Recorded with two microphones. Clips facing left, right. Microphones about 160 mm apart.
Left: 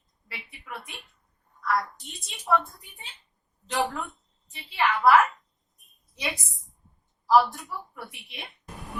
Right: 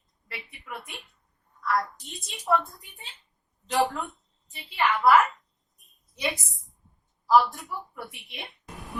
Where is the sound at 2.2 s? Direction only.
Centre (ahead or behind).